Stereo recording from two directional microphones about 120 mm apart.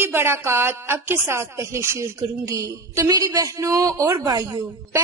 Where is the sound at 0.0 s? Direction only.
20° right (ahead or behind).